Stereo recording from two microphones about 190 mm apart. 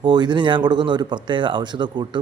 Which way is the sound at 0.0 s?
25° right (ahead or behind).